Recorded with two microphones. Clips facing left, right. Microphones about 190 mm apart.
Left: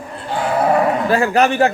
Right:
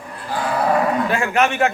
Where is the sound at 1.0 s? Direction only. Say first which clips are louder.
Left 4 dB; 35° left (ahead or behind).